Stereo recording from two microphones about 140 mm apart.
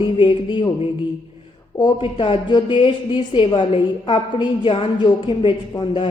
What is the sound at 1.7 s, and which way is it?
A woman's voice, 35° left (ahead or behind).